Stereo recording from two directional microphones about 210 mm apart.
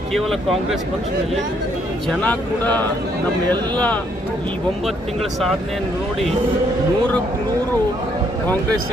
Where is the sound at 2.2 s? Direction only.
10° left (ahead or behind).